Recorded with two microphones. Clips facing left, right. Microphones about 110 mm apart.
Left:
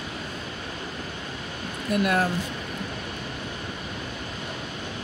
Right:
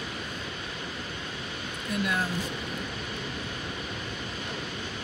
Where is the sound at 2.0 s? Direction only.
65° left (ahead or behind).